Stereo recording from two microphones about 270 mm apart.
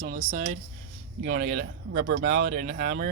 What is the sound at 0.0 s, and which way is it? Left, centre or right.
Speech, right.